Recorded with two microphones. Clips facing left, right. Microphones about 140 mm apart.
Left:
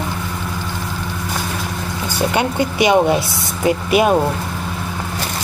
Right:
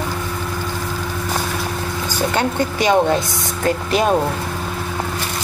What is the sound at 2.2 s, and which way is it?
Speech, 15° left (ahead or behind).